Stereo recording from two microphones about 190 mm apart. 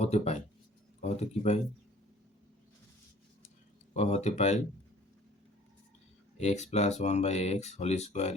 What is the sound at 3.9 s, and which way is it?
Speech, 35° left (ahead or behind).